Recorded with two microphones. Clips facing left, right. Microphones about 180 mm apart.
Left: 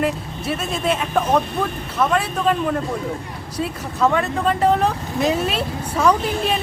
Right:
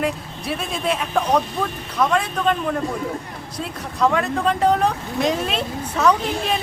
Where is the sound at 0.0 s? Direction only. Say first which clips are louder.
Left 2 dB; centre (ahead or behind).